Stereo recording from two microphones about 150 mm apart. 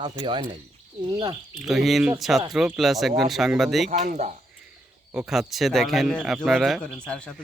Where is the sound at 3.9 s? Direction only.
50° right (ahead or behind).